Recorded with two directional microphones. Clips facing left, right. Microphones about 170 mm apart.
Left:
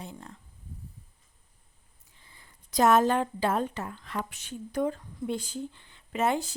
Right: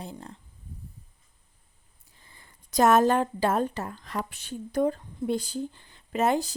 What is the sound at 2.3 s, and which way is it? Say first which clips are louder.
Speech: right 3 dB; 45° right (ahead or behind).